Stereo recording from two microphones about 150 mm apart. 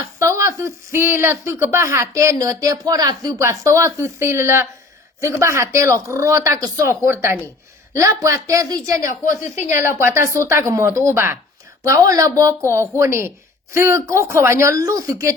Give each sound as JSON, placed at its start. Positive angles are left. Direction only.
{"t": 0.2, "sound": "speech", "side_deg": -20}